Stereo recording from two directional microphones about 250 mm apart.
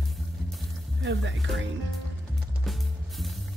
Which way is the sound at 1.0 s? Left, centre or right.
Right.